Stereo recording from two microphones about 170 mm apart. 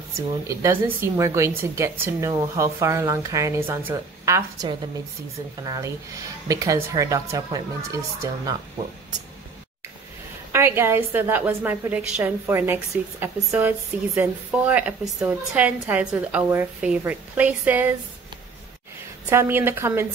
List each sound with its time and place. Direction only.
0.5 s a woman's voice: 15° right (ahead or behind)
10.5 s speech: 15° right (ahead or behind)
19.2 s speech: 10° right (ahead or behind)